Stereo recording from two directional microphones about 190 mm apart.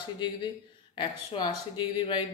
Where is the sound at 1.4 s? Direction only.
25° left (ahead or behind).